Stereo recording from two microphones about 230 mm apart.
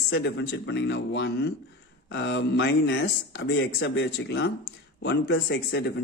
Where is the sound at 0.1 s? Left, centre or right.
Left.